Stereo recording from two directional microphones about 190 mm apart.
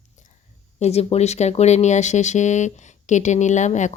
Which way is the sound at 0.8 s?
35° left (ahead or behind).